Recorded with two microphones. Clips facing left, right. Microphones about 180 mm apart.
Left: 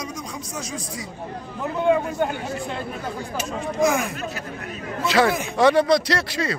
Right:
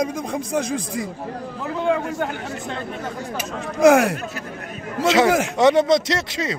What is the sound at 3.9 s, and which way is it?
Speech, 70° right (ahead or behind).